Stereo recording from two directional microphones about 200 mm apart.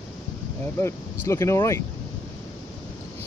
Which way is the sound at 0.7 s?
15° left (ahead or behind).